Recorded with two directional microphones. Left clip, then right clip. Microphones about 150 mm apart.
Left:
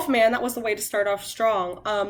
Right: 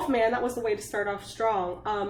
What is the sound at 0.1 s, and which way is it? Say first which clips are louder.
A woman's voice: left 6 dB; 20° left (ahead or behind).